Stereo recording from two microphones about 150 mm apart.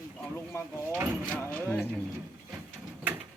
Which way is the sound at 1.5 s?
10° left (ahead or behind).